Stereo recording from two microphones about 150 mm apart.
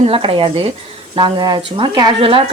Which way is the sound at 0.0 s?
40° right (ahead or behind).